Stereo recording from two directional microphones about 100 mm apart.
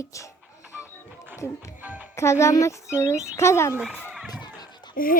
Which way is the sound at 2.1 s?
30° left (ahead or behind).